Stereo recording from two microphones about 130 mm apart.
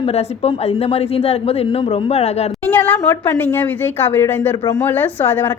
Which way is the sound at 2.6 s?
10° left (ahead or behind).